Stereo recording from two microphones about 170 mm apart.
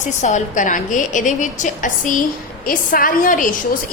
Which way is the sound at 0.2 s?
45° left (ahead or behind).